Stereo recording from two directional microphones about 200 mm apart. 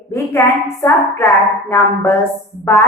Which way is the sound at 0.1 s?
15° left (ahead or behind).